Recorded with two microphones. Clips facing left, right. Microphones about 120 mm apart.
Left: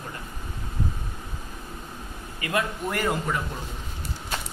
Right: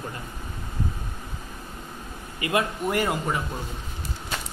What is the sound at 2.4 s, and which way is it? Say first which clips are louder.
A man's voice: right 2 dB; 15° right (ahead or behind).